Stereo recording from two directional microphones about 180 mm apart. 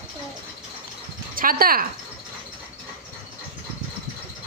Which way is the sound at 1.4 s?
55° right (ahead or behind).